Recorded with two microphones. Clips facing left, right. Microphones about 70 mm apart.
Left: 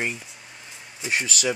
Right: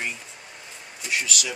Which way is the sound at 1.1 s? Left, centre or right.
Left.